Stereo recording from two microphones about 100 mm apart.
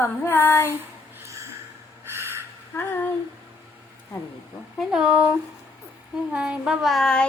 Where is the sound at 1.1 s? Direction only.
30° right (ahead or behind).